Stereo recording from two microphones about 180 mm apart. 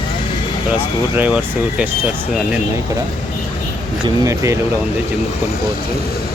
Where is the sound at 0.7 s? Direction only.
10° right (ahead or behind).